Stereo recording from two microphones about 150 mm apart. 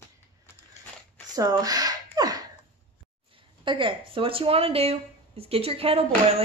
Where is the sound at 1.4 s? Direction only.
25° right (ahead or behind).